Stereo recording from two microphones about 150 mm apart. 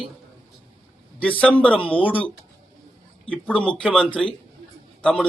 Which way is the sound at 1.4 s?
5° left (ahead or behind).